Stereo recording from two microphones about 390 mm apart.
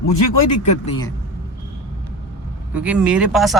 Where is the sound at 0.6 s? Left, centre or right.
Centre.